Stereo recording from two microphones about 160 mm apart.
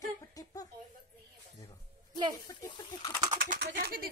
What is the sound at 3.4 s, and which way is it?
Speech, 70° right (ahead or behind).